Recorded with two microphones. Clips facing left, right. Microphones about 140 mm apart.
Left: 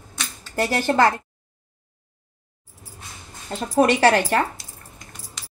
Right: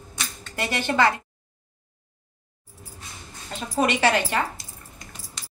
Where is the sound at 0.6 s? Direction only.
40° left (ahead or behind).